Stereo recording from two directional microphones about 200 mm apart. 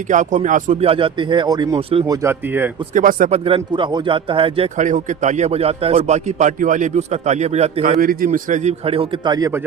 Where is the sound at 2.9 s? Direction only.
40° right (ahead or behind).